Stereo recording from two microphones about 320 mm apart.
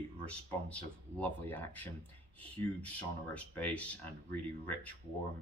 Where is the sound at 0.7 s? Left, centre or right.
Centre.